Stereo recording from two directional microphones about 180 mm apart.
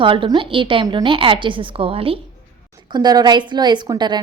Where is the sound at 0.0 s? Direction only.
30° right (ahead or behind).